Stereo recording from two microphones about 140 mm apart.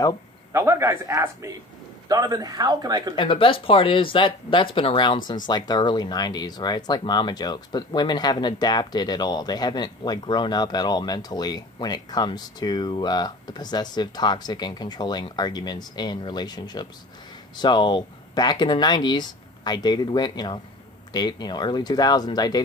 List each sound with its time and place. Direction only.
0.5 s speech: 20° right (ahead or behind)
3.2 s speech: 40° left (ahead or behind)